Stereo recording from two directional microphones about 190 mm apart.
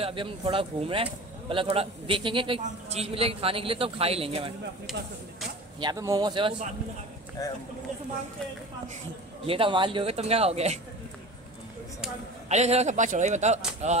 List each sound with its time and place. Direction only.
0.0 s a man's voice: 25° right (ahead or behind)
4.9 s speech: centre (ahead or behind)
5.8 s a man's voice: 20° right (ahead or behind)
7.4 s speech: 20° left (ahead or behind)
9.5 s a man's voice: 25° right (ahead or behind)
12.4 s a man's voice: 35° right (ahead or behind)